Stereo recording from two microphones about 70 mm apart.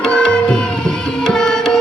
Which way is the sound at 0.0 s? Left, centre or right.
Centre.